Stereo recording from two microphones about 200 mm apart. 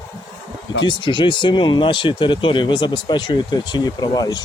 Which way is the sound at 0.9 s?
25° left (ahead or behind).